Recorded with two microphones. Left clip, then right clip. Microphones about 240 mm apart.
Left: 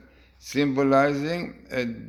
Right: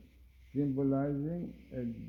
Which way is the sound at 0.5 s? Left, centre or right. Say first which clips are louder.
Left 13 dB; centre.